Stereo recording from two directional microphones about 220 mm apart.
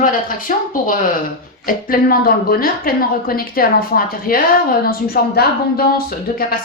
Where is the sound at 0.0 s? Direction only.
40° left (ahead or behind).